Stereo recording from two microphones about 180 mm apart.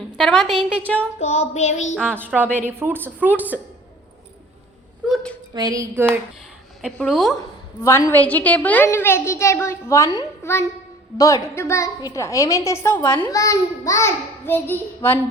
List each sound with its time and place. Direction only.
0.2 s a woman's voice: centre (ahead or behind)
1.2 s child singing: 35° left (ahead or behind)
2.0 s a woman's voice: 10° right (ahead or behind)
5.1 s a woman's voice: 5° left (ahead or behind)
5.5 s speech: 20° right (ahead or behind)
6.8 s a woman's voice: centre (ahead or behind)
7.8 s a woman's voice: 15° left (ahead or behind)